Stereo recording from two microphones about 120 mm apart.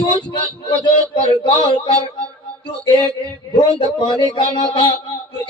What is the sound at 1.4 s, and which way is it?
Speech, 40° left (ahead or behind).